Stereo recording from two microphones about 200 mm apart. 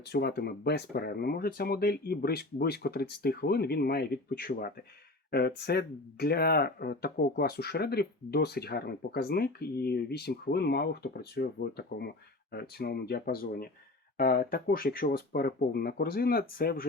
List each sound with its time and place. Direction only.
0.0 s speech: 55° left (ahead or behind)